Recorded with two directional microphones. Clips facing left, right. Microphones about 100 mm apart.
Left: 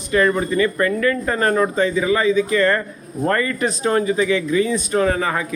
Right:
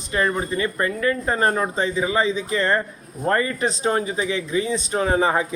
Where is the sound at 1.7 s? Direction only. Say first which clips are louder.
Left 4 dB; 25° right (ahead or behind).